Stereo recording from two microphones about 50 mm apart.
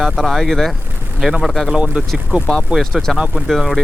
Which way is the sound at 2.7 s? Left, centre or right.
Right.